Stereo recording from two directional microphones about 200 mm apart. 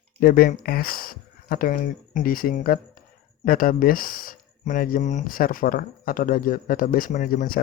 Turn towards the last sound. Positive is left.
turn(degrees=45)  # may be behind; listen again after turning